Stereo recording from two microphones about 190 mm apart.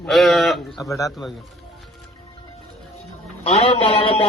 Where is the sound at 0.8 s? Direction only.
15° left (ahead or behind).